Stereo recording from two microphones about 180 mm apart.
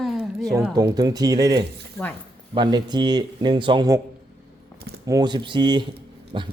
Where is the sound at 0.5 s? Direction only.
20° right (ahead or behind).